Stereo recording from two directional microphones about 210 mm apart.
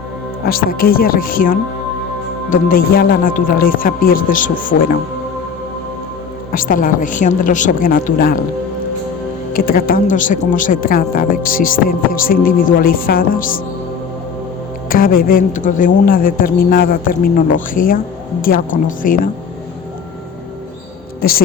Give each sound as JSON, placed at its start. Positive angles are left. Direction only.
{"t": 0.4, "sound": "a woman's voice", "side_deg": 45}
{"t": 6.5, "sound": "speech", "side_deg": 40}
{"t": 9.5, "sound": "speech", "side_deg": 45}
{"t": 14.8, "sound": "a woman's voice", "side_deg": 45}
{"t": 21.2, "sound": "a woman's voice", "side_deg": 45}